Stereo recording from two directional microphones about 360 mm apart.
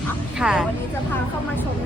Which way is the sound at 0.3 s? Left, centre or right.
Centre.